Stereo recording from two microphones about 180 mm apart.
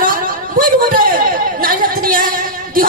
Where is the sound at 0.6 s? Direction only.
50° right (ahead or behind).